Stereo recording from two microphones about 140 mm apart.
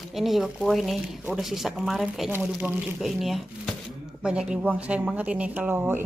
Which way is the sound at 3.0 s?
Centre (ahead or behind).